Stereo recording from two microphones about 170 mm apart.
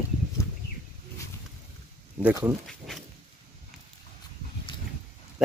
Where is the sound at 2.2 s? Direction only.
20° right (ahead or behind).